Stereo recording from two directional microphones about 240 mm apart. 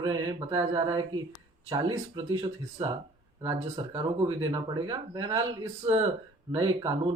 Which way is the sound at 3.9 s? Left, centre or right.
Centre.